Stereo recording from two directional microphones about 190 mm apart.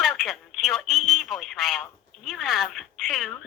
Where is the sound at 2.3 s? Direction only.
Centre (ahead or behind).